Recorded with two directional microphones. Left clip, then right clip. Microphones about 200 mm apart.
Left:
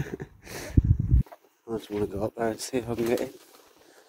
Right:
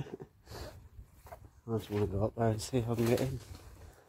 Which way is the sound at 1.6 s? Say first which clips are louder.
Left 5 dB; 30° left (ahead or behind).